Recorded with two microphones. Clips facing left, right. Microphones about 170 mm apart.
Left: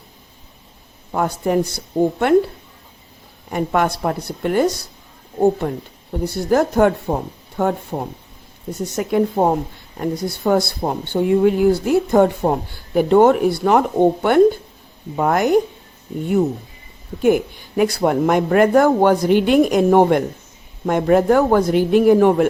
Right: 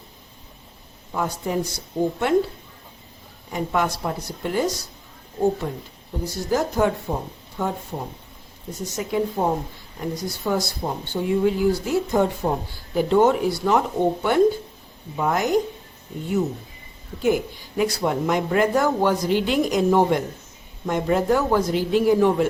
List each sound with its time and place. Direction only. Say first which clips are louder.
1.1 s speech: left 6 dB; 60° left (ahead or behind)
3.5 s speech: left 5 dB; 60° left (ahead or behind)
17.2 s speech: left 5 dB; 55° left (ahead or behind)